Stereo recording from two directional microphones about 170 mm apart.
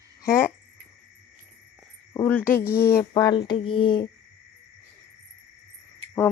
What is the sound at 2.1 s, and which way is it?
Cricket, 10° left (ahead or behind).